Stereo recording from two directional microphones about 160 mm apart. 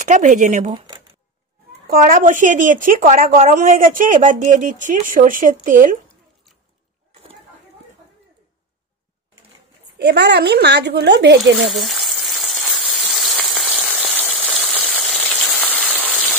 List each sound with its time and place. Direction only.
0.0 s speech: 50° right (ahead or behind)
0.7 s a sound: 30° right (ahead or behind)
1.9 s speech: 60° right (ahead or behind)
9.9 s speech: 90° right
11.7 s frying: centre (ahead or behind)
15.6 s rain on surface: 10° right (ahead or behind)
16.1 s a sound: 5° right (ahead or behind)